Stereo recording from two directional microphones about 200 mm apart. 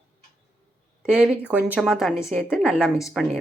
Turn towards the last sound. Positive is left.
turn(degrees=0)  # may be behind; listen again after turning